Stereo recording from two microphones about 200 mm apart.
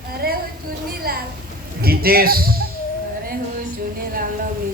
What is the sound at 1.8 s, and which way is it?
Speech, 50° right (ahead or behind).